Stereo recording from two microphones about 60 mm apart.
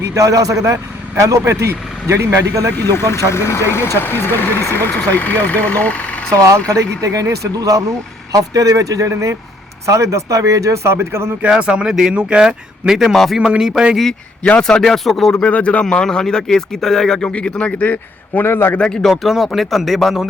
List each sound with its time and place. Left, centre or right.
0.1 s speech: right
2.8 s speech: left
6.3 s speech: right
11.6 s speech: centre
13.1 s speech: centre
14.6 s speech: centre
15.4 s speech: left
18.8 s speech: centre